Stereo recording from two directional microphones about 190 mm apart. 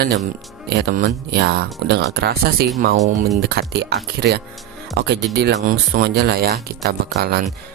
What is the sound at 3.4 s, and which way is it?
Speech, 55° right (ahead or behind).